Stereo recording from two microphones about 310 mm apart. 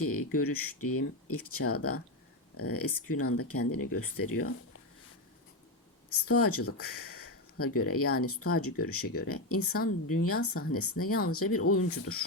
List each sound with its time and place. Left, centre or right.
0.0 s speech: left
6.1 s speech: left
6.7 s speech: left
7.2 s a sound: left
7.8 s speech: left